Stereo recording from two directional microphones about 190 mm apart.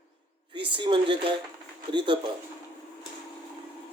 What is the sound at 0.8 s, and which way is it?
Speech, 25° right (ahead or behind).